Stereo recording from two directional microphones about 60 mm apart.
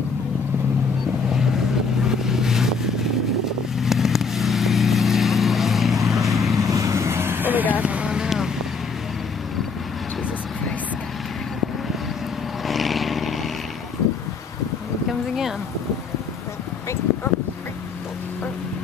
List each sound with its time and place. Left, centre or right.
2.0 s vehicle: centre
6.5 s vehicle: right; by 8.3 s centre
12.6 s vehicle: centre
15.0 s a sound: centre